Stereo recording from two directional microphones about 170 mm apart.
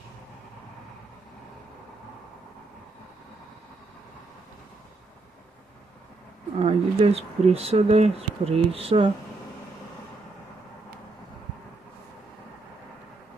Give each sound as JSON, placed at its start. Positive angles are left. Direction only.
{"t": 6.6, "sound": "speech", "side_deg": -40}